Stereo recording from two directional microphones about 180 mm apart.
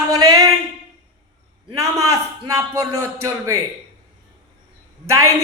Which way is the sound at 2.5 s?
15° right (ahead or behind).